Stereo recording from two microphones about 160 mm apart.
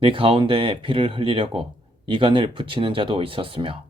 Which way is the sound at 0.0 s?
35° right (ahead or behind).